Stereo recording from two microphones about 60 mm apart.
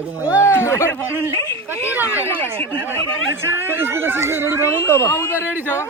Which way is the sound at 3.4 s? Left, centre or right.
Right.